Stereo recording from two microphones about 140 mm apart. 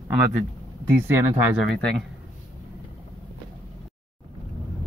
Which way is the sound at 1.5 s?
Centre (ahead or behind).